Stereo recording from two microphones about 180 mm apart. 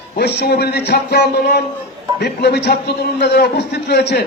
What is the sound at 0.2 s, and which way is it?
A man's voice, 65° left (ahead or behind).